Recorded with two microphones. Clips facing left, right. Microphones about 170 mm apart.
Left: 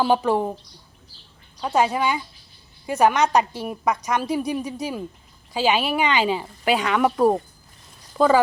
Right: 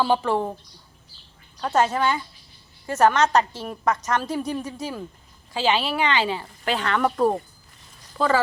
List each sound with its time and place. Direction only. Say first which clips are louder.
0.0 s a woman's voice: left 2 dB; 15° left (ahead or behind)
1.6 s a woman's voice: even; 10° left (ahead or behind)